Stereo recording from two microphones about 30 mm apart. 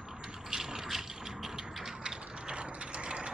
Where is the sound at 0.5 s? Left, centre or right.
Centre.